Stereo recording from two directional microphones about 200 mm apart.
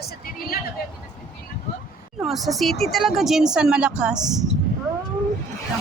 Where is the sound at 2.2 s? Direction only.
Centre (ahead or behind).